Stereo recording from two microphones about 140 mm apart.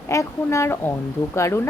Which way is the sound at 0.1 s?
20° left (ahead or behind).